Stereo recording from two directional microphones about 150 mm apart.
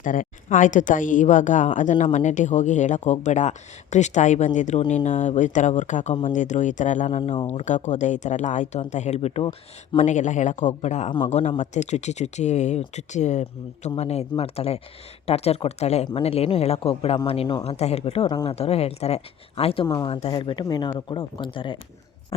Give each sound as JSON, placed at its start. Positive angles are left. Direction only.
{"t": 0.0, "sound": "a woman's voice", "side_deg": 60}
{"t": 7.2, "sound": "speech", "side_deg": 40}
{"t": 10.0, "sound": "speech", "side_deg": 55}
{"t": 18.3, "sound": "speech", "side_deg": 30}
{"t": 18.5, "sound": "speech", "side_deg": 45}